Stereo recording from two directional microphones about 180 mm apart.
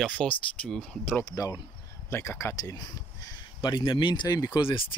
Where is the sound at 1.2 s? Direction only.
20° left (ahead or behind).